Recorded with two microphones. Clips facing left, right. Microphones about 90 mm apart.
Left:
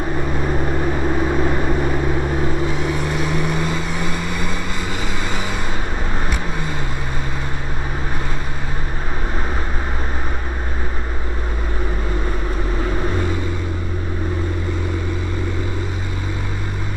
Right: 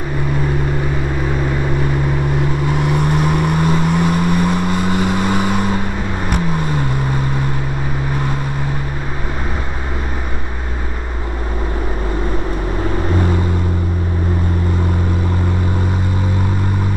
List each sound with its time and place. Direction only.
2.9 s vehicle: 55° right (ahead or behind)